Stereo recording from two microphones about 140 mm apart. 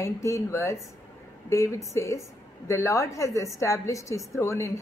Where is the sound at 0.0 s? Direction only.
20° left (ahead or behind).